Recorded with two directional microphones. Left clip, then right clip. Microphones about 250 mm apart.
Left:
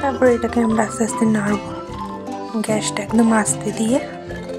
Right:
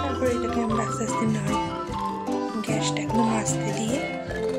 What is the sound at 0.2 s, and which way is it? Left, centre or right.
Speech, centre.